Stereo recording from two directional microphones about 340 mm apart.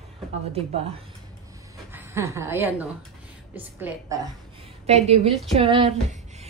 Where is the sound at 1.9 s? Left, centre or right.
Centre.